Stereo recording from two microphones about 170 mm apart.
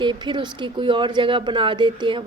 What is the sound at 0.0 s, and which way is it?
Speech, 30° right (ahead or behind).